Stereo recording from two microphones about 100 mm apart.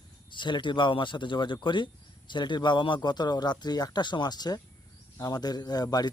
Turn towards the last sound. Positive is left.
turn(degrees=40)  # may be behind; listen again after turning